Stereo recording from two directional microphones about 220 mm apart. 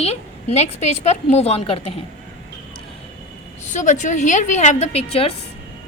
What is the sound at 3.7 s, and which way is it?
A woman's voice, 35° left (ahead or behind).